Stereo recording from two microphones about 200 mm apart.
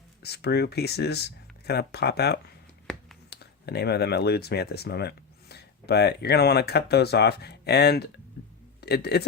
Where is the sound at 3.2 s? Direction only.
55° left (ahead or behind).